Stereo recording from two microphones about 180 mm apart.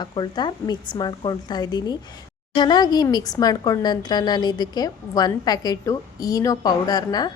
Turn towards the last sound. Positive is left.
turn(degrees=20)  # may be behind; listen again after turning